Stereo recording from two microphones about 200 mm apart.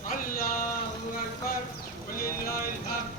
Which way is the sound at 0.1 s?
45° left (ahead or behind).